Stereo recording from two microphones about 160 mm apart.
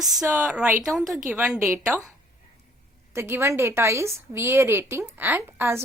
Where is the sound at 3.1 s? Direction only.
15° right (ahead or behind).